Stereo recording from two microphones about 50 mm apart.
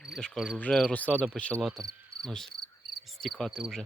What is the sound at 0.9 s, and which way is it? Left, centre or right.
Speech, left.